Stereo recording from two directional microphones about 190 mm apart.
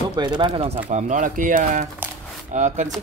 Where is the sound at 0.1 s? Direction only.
20° right (ahead or behind).